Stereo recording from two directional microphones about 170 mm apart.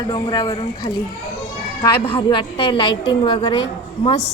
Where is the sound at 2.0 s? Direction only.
30° left (ahead or behind).